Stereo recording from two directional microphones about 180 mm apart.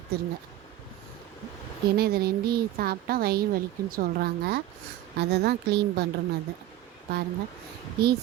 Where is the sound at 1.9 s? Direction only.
60° right (ahead or behind).